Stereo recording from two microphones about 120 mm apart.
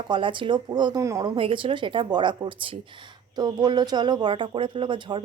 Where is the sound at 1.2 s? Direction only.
45° right (ahead or behind).